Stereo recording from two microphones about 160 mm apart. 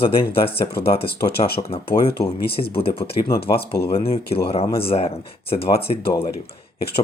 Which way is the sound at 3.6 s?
80° left.